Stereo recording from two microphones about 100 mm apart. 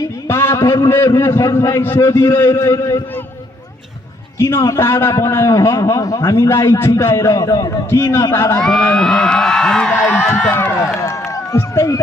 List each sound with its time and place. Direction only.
0.0 s a man's voice: 25° left (ahead or behind)
4.4 s a man's voice: 25° left (ahead or behind)
8.5 s speech: 10° left (ahead or behind)
9.8 s a sound: 20° left (ahead or behind)
11.0 s run: 30° left (ahead or behind)